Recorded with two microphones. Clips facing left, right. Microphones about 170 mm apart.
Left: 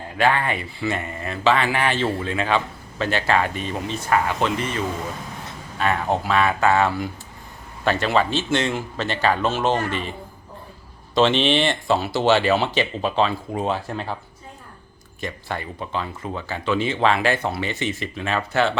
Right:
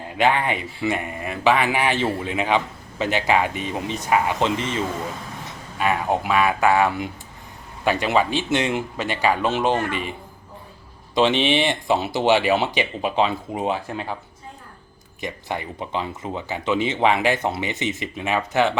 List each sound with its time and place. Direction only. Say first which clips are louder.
0.2 s speech: right 1 dB; 15° right (ahead or behind)
5.8 s speech: even; 10° right (ahead or behind)
11.1 s speech: left 1 dB; 15° right (ahead or behind)
15.2 s speech: right 1 dB; 15° right (ahead or behind)